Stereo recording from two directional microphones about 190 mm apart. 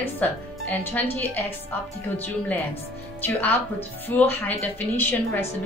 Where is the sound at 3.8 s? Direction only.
10° left (ahead or behind).